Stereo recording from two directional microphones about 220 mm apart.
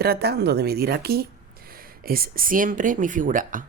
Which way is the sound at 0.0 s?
45° right (ahead or behind).